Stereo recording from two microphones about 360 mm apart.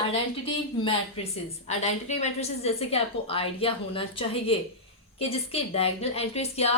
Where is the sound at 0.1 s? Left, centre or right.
Centre.